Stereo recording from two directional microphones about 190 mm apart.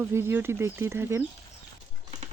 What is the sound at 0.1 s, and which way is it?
Speech, 15° right (ahead or behind).